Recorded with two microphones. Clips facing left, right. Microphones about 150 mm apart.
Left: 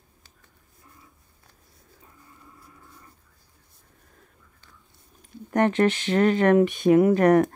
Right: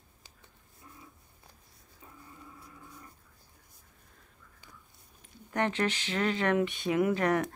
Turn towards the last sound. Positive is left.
turn(degrees=45)  # may be behind; listen again after turning